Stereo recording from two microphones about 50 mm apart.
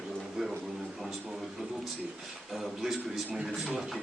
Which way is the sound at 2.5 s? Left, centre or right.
Centre.